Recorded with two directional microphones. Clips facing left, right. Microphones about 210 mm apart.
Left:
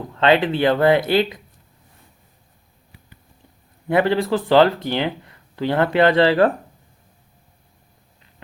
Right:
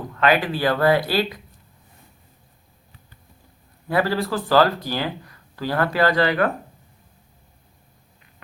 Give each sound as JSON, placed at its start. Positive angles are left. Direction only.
{"t": 0.2, "sound": "speech", "side_deg": 25}
{"t": 3.8, "sound": "speech", "side_deg": 20}